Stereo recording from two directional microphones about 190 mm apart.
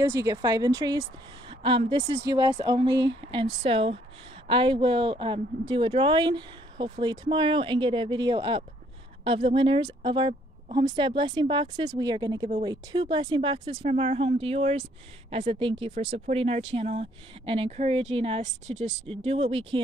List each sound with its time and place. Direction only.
0.0 s speech: 20° right (ahead or behind)